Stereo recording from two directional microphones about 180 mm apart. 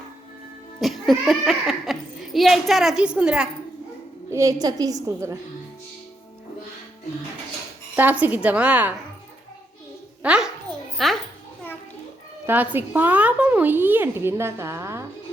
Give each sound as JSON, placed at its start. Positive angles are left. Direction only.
{"t": 0.8, "sound": "a child's voice", "side_deg": 0}
{"t": 4.3, "sound": "a woman's voice", "side_deg": -15}
{"t": 7.9, "sound": "a woman's voice", "side_deg": -10}
{"t": 10.2, "sound": "a child's voice", "side_deg": -5}
{"t": 12.5, "sound": "a woman's voice", "side_deg": -10}